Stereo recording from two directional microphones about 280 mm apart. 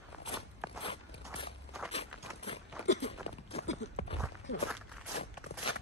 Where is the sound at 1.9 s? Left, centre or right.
Left.